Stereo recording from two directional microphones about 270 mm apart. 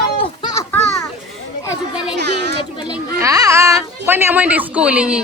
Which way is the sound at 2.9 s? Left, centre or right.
Centre.